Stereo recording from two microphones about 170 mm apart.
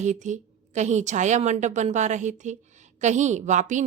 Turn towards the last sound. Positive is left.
turn(degrees=-45)  # may be behind; listen again after turning